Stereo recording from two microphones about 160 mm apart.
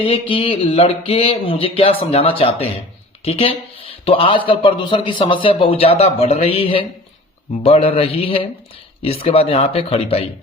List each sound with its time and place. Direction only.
0.0 s a man's voice: 35° left (ahead or behind)